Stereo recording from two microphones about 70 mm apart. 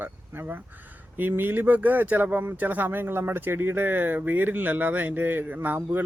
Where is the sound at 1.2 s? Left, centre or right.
Right.